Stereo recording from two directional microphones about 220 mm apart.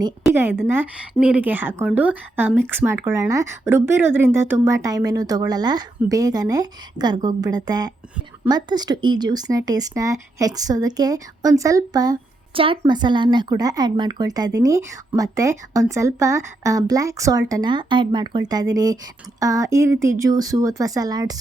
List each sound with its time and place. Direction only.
0.2 s speech: 5° right (ahead or behind)